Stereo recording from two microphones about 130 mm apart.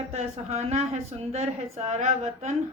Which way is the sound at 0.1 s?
55° right (ahead or behind).